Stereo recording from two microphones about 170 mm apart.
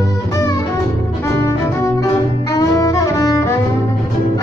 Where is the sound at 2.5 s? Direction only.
20° left (ahead or behind).